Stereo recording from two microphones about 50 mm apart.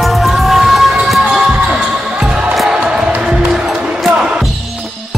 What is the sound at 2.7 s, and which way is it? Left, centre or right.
Music, centre.